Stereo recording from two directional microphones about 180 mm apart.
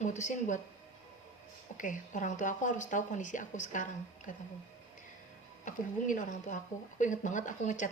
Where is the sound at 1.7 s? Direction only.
45° left (ahead or behind).